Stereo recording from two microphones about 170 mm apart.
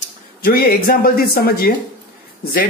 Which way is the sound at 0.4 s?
60° left (ahead or behind).